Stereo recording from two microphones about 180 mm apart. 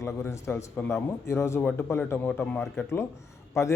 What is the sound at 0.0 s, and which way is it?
A man's voice, 15° left (ahead or behind).